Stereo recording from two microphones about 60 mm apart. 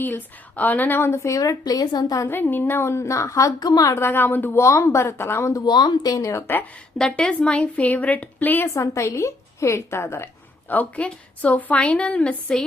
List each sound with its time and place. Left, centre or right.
0.5 s a woman's voice: left
1.4 s a woman's voice: left
2.2 s a woman's voice: left
3.9 s a woman's voice: left
4.5 s a woman's voice: left
5.5 s a woman's voice: left
7.0 s a woman's voice: centre; by 8.6 s left
8.6 s speech: left
10.7 s a woman's voice: left